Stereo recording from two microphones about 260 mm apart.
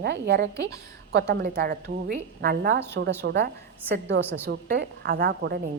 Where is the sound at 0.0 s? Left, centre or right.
Right.